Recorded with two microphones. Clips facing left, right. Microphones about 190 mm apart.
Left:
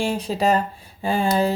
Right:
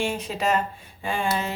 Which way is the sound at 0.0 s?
35° left (ahead or behind).